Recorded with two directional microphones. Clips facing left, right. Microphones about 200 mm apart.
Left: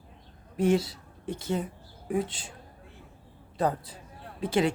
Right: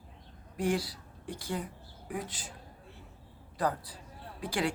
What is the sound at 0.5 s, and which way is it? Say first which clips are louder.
A woman's voice: left 6 dB; 25° left (ahead or behind).